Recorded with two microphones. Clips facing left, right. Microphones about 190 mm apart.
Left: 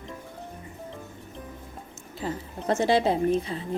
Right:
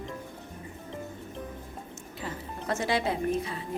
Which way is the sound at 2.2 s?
25° left (ahead or behind).